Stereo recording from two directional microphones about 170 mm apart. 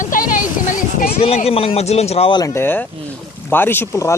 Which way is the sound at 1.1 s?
35° left (ahead or behind).